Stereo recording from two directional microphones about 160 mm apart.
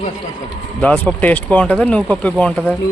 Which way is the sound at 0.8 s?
10° left (ahead or behind).